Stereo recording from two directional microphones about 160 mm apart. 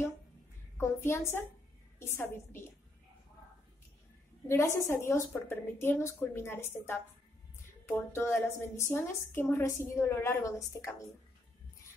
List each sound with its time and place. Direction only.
0.7 s a woman's voice: 15° left (ahead or behind)
4.5 s a woman's voice: 20° left (ahead or behind)
8.1 s a woman's voice: 15° left (ahead or behind)